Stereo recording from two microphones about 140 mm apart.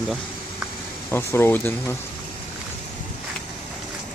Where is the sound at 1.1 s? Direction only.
15° left (ahead or behind).